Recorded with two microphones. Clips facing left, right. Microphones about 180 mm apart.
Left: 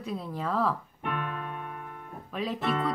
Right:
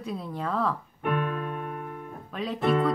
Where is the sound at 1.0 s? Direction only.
50° right (ahead or behind).